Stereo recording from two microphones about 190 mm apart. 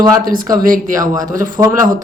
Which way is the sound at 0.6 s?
45° right (ahead or behind).